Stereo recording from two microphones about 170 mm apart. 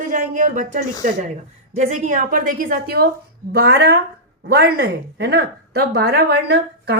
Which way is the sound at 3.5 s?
70° right (ahead or behind).